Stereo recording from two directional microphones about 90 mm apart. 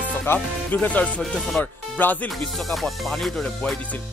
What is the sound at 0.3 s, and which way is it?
Music, 25° left (ahead or behind).